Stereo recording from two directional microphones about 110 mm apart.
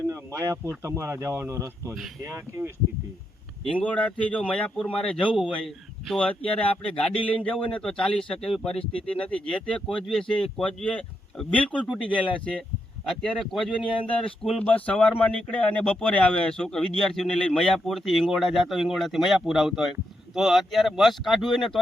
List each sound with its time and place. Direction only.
0.1 s speech: 25° right (ahead or behind)
3.6 s speech: 10° left (ahead or behind)